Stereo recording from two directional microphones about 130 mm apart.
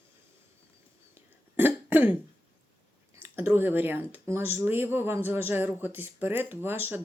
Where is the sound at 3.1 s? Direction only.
15° right (ahead or behind).